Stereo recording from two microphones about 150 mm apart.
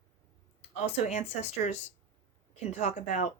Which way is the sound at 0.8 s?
50° left (ahead or behind).